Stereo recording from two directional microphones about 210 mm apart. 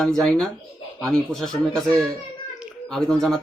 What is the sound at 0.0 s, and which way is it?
Speech, 5° left (ahead or behind).